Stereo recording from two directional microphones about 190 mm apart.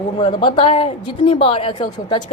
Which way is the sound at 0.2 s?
25° left (ahead or behind).